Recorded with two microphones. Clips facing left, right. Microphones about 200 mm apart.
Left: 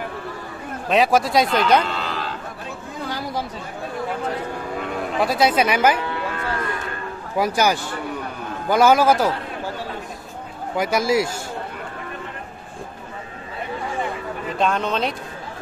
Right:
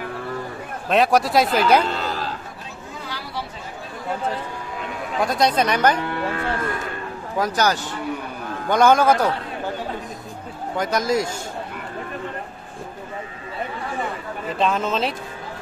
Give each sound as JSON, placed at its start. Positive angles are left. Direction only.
{"t": 0.8, "sound": "a man's voice", "side_deg": 0}
{"t": 1.9, "sound": "a sound", "side_deg": -45}
{"t": 3.1, "sound": "a sound", "side_deg": 45}
{"t": 5.2, "sound": "speech", "side_deg": 5}
{"t": 7.3, "sound": "a man's voice", "side_deg": 10}
{"t": 10.8, "sound": "speech", "side_deg": 10}
{"t": 14.6, "sound": "a man's voice", "side_deg": 0}